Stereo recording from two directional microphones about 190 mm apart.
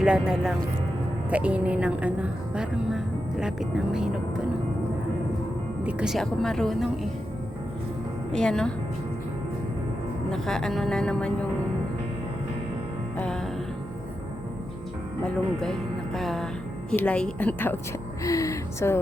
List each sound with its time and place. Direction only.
0.0 s a woman's voice: 5° right (ahead or behind)
5.8 s speech: 5° right (ahead or behind)
8.3 s speech: 5° left (ahead or behind)
10.3 s speech: 5° left (ahead or behind)
13.1 s music: 5° left (ahead or behind)
16.1 s a woman's voice: centre (ahead or behind)
18.2 s a sound: 15° left (ahead or behind)